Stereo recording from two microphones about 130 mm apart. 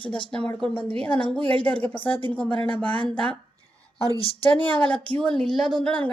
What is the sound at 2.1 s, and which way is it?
Speech, 40° left (ahead or behind).